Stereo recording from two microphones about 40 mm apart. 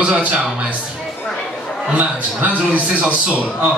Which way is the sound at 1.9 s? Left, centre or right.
Right.